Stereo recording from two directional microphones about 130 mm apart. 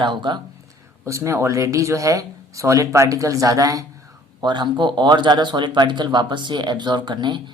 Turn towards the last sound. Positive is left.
turn(degrees=-35)  # may be behind; listen again after turning